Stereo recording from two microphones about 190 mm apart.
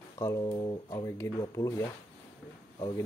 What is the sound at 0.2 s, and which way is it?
Speech, 15° left (ahead or behind).